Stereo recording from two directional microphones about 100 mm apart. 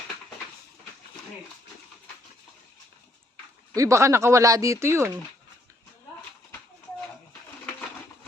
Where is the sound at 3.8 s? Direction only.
30° right (ahead or behind).